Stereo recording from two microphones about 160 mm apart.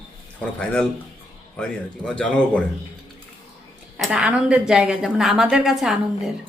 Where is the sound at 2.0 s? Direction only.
10° left (ahead or behind).